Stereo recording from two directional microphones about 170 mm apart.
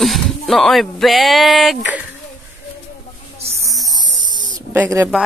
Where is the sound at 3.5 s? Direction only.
20° right (ahead or behind).